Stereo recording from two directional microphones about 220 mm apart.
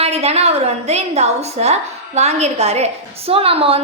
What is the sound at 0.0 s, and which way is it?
A woman's voice, 30° right (ahead or behind).